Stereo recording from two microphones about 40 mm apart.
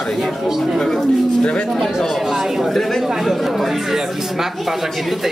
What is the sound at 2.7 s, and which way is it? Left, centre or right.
Speech, centre.